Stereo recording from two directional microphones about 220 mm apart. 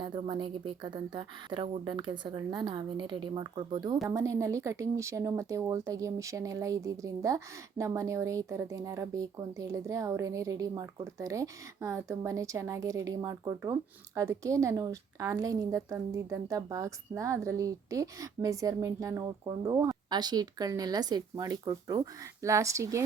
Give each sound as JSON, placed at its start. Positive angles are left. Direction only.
{"t": 0.0, "sound": "a woman's voice", "side_deg": -20}